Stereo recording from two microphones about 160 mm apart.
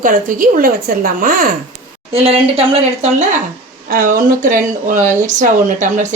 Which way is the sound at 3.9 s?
60° right (ahead or behind).